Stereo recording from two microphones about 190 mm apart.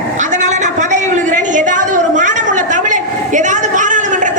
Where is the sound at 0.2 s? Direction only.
40° right (ahead or behind).